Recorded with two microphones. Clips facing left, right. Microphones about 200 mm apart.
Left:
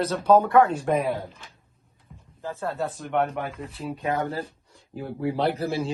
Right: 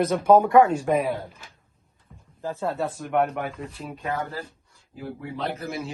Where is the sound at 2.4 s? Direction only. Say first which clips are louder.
Right 3 dB; 15° right (ahead or behind).